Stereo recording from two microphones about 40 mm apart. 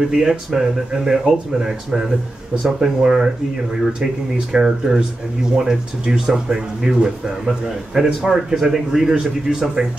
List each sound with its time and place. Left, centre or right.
0.1 s a man's voice: centre